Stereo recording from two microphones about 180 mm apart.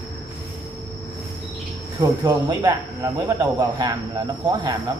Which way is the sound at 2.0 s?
20° right (ahead or behind).